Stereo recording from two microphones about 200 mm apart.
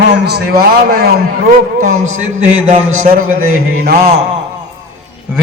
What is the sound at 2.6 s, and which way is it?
Speech, 40° right (ahead or behind).